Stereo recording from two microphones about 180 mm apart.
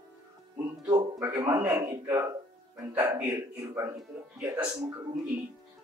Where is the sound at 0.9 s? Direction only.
20° right (ahead or behind).